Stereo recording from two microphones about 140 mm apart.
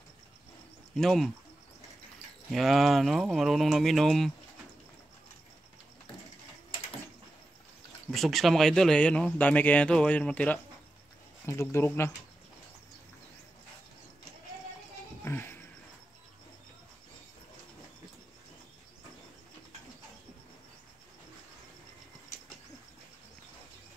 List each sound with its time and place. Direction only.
0.9 s speech: centre (ahead or behind)
2.5 s speech: centre (ahead or behind)
8.1 s speech: centre (ahead or behind); by 12.1 s 15° left (ahead or behind)
15.2 s a sound: 15° left (ahead or behind)